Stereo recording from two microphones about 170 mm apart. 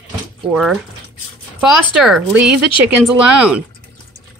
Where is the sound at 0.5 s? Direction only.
Centre (ahead or behind).